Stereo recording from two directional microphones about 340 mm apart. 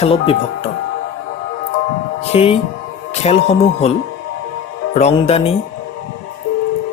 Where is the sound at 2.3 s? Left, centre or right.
Centre.